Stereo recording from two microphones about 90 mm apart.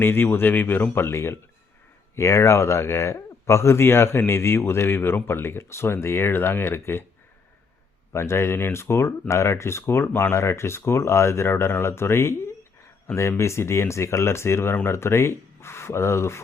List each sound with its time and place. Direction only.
0.0 s speech: 25° left (ahead or behind)
8.1 s speech: 30° left (ahead or behind)